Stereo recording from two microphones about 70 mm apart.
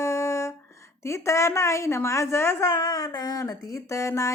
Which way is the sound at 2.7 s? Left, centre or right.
Left.